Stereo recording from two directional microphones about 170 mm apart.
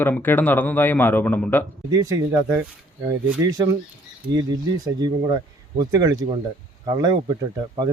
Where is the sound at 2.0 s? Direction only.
20° right (ahead or behind).